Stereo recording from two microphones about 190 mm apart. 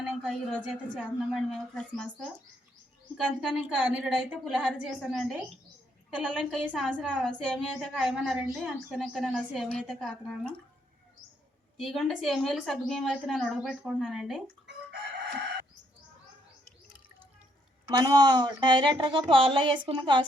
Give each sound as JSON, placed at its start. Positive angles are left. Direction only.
{"t": 0.0, "sound": "a sound", "side_deg": -5}
{"t": 0.9, "sound": "a woman's voice", "side_deg": -5}
{"t": 3.4, "sound": "a woman's voice", "side_deg": -5}
{"t": 11.8, "sound": "a woman's voice", "side_deg": 0}
{"t": 17.9, "sound": "speech", "side_deg": -20}